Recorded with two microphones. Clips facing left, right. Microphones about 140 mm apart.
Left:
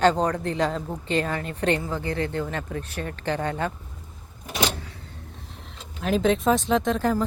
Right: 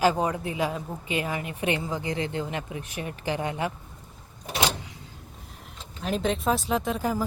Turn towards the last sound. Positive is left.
turn(degrees=-5)  # may be behind; listen again after turning